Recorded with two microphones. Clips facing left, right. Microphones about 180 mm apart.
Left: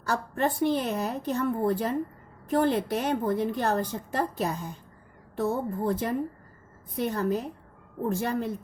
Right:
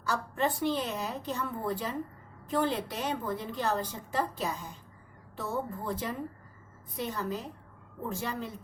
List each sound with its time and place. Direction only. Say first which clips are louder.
0.0 s a woman's voice: left 3 dB; 55° left (ahead or behind)